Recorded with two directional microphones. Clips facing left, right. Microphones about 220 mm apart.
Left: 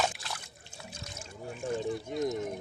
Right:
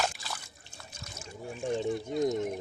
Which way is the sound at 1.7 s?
25° right (ahead or behind).